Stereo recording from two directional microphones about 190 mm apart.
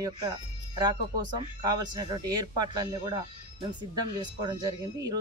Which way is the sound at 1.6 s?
20° right (ahead or behind).